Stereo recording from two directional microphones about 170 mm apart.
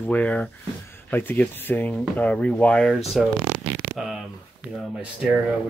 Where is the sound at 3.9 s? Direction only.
Centre (ahead or behind).